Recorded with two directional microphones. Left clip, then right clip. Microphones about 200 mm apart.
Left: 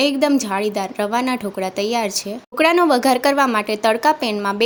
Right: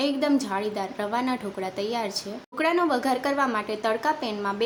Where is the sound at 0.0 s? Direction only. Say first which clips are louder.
Left 7 dB; 40° left (ahead or behind).